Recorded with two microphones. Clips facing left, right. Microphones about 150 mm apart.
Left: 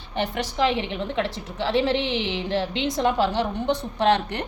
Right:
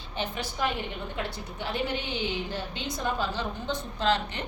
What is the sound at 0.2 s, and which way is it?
A woman's voice, 80° left.